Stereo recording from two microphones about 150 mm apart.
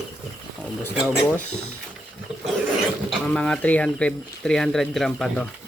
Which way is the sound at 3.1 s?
5° left (ahead or behind).